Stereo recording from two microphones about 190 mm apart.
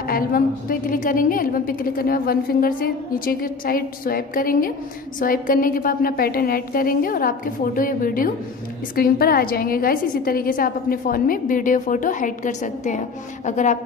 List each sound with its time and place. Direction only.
0.0 s a woman's voice: 50° left (ahead or behind)